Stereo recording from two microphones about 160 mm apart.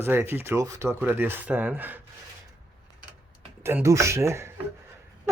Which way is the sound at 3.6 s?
15° right (ahead or behind).